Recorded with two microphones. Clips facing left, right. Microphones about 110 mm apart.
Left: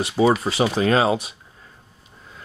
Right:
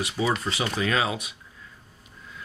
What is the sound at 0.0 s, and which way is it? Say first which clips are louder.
Speech: left 8 dB; 35° left (ahead or behind).